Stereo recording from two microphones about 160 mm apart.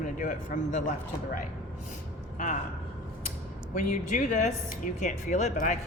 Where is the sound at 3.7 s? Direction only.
55° left (ahead or behind).